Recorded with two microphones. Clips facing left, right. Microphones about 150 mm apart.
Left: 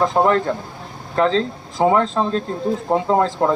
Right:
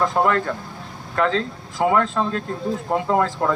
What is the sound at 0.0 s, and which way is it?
Speech, 25° left (ahead or behind).